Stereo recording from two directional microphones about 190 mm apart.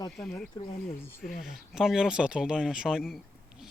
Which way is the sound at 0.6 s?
25° left (ahead or behind).